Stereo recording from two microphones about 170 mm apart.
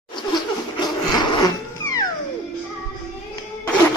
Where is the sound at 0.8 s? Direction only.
25° left (ahead or behind).